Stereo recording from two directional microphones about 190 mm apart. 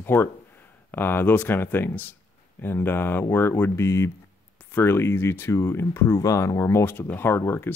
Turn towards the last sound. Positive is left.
turn(degrees=10)  # may be behind; listen again after turning